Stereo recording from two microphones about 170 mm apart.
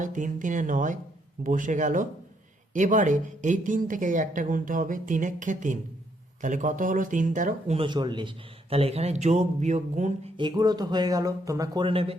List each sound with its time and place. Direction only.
0.0 s a woman's voice: 50° right (ahead or behind)
7.8 s a man's voice: 25° right (ahead or behind); by 10.3 s 45° right (ahead or behind)
10.3 s speech: 25° right (ahead or behind)